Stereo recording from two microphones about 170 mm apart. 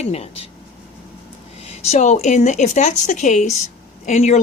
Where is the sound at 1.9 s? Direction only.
45° left (ahead or behind).